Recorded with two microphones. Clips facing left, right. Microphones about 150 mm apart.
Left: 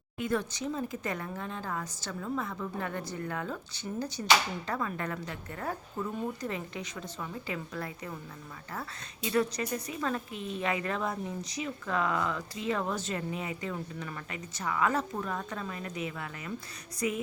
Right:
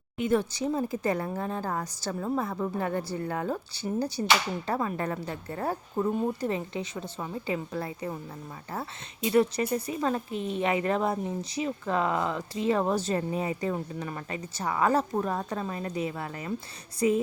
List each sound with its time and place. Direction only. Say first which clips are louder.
0.2 s a woman's voice: right 5 dB; 25° right (ahead or behind)